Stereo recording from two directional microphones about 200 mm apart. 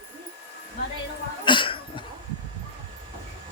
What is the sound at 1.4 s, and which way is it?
Cough, 25° left (ahead or behind).